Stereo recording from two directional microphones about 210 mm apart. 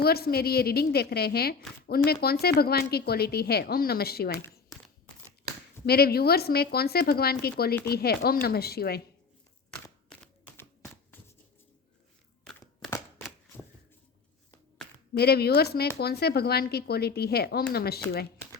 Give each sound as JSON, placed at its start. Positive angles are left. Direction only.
{"t": 0.0, "sound": "speech", "side_deg": 50}
{"t": 5.8, "sound": "speech", "side_deg": 50}
{"t": 15.1, "sound": "speech", "side_deg": 50}